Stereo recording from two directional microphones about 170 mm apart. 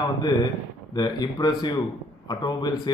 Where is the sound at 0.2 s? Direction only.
25° left (ahead or behind).